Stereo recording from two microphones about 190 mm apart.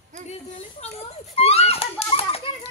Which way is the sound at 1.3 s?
35° left (ahead or behind).